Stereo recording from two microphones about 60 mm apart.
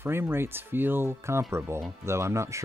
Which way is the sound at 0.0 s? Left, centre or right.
Right.